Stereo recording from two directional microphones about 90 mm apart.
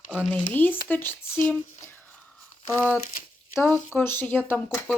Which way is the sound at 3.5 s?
30° left (ahead or behind).